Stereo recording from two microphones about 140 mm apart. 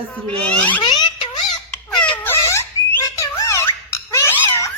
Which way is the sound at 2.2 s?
20° left (ahead or behind).